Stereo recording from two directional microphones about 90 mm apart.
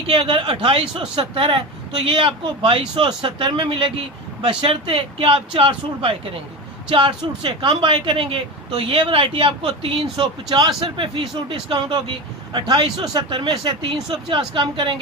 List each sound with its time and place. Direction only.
0.1 s speech: 80° right
4.4 s speech: 90° right; by 10.8 s 55° right (ahead or behind)
10.8 s speech: 65° right (ahead or behind)
12.5 s speech: 55° right (ahead or behind)